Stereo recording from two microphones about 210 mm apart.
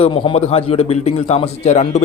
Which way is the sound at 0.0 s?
25° left (ahead or behind).